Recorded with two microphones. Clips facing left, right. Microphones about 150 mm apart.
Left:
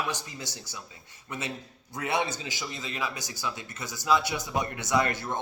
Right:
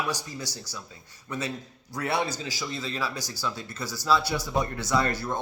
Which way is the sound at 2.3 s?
40° right (ahead or behind).